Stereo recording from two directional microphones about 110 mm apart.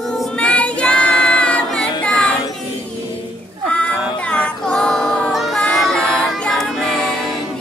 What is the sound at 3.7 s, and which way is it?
Music, 10° left (ahead or behind).